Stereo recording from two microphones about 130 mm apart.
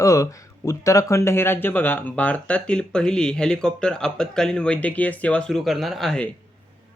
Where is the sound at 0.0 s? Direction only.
25° left (ahead or behind); by 6.3 s 5° left (ahead or behind).